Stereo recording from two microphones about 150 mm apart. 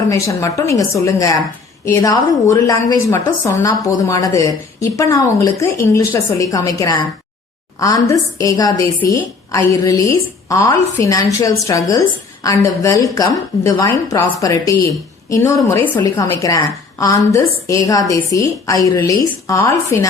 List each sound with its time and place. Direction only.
0.1 s a woman's voice: 20° left (ahead or behind)